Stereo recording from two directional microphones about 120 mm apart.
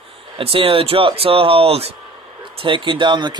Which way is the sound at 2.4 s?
45° right (ahead or behind).